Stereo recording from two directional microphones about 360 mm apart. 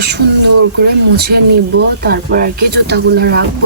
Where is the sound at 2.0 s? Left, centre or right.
Right.